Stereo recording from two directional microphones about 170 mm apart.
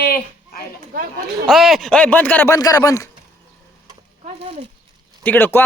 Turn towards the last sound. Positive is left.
turn(degrees=10)  # may be behind; listen again after turning